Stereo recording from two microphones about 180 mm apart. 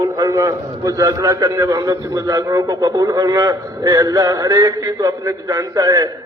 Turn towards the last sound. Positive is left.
turn(degrees=-20)  # may be behind; listen again after turning